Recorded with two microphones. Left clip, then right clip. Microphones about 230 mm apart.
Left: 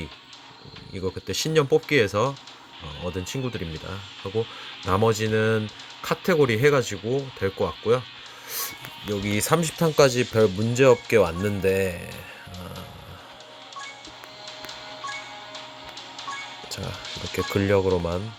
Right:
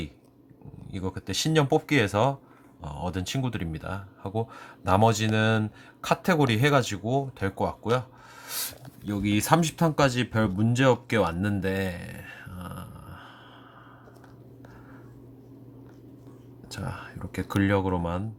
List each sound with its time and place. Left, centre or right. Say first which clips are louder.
1.0 s speech: left 2 dB; centre
4.9 s speech: left 1 dB; centre
9.2 s speech: right 1 dB; centre
16.6 s music: right 1 dB; centre
17.3 s speech: left 4 dB; centre